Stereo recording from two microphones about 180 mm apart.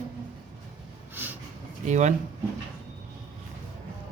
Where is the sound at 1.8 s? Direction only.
40° right (ahead or behind).